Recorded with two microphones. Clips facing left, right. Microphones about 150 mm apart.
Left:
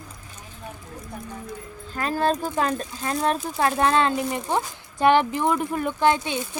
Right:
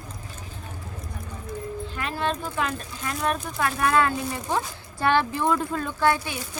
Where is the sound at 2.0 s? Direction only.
40° left (ahead or behind).